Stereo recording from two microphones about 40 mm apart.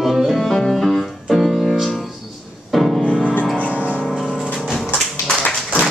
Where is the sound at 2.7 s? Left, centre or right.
Centre.